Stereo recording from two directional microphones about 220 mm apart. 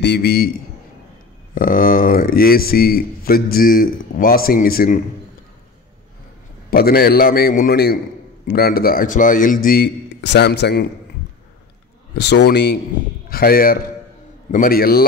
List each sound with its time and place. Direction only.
0.0 s a man's voice: 50° left (ahead or behind)
1.5 s a man's voice: 40° left (ahead or behind)
6.7 s a man's voice: 45° left (ahead or behind)
12.2 s a man's voice: 50° left (ahead or behind)